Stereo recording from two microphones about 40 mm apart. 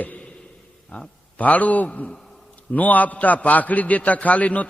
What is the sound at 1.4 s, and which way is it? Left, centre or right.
A man's voice, left.